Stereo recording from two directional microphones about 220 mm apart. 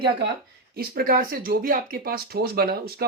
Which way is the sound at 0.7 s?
45° right (ahead or behind).